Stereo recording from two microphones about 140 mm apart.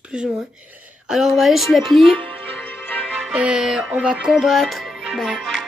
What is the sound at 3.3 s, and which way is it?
Music, 5° right (ahead or behind).